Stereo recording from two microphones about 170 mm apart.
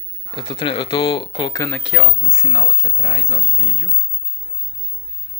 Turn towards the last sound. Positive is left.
turn(degrees=-15)  # may be behind; listen again after turning